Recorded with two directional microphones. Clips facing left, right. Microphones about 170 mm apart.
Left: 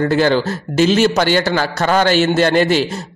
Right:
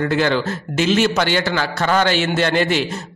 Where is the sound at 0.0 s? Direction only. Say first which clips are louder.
Left 4 dB; 35° left (ahead or behind).